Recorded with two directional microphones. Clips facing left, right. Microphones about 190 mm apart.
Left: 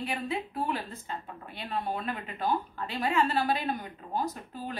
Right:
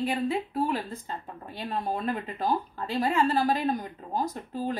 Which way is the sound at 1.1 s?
35° right (ahead or behind).